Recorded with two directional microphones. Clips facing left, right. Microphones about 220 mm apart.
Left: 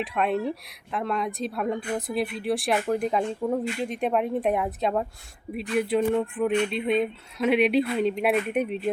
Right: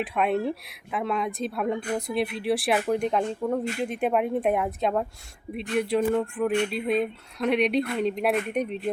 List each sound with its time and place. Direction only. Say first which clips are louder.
0.0 s a woman's voice: right 1 dB; centre (ahead or behind)